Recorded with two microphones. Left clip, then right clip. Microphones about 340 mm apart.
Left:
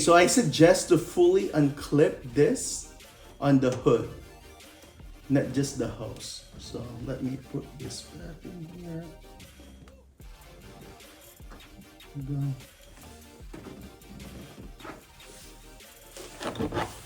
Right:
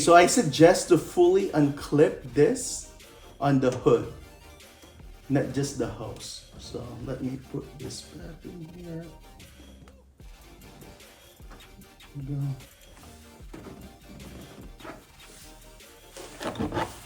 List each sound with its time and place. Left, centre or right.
0.0 s speech: centre
5.3 s speech: centre
14.8 s music: centre
16.1 s a sound: centre